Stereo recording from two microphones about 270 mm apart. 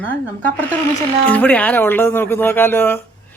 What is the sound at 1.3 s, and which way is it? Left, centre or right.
Speech, centre.